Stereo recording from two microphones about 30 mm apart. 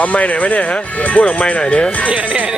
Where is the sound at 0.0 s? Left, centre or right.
Left.